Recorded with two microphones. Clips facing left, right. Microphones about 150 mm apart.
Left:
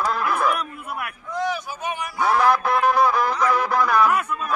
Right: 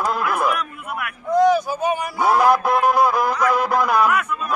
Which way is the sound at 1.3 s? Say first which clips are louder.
Right 11 dB; 40° right (ahead or behind).